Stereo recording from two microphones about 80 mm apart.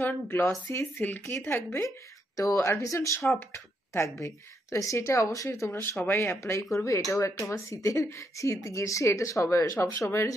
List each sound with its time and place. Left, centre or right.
0.0 s speech: left
5.7 s speech: left